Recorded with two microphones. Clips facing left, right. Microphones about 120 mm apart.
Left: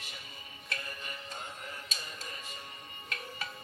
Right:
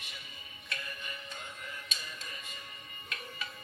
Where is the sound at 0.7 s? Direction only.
35° left (ahead or behind).